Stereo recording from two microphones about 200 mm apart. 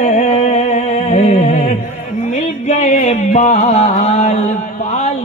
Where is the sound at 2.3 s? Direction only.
35° left (ahead or behind).